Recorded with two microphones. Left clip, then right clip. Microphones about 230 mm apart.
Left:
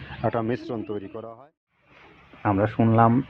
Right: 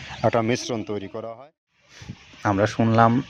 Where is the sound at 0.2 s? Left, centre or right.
Right.